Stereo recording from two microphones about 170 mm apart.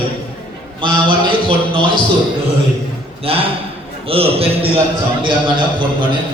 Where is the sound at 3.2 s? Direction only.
35° right (ahead or behind).